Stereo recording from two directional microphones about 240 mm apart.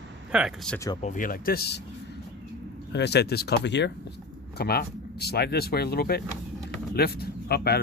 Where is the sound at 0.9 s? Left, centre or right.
Left.